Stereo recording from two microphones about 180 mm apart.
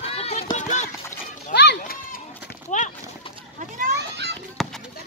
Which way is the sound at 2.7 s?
40° left (ahead or behind).